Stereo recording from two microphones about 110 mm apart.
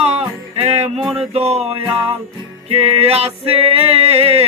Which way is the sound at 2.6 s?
65° right (ahead or behind).